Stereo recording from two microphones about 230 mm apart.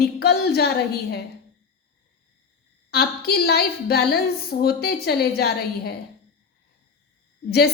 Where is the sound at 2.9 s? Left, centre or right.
Left.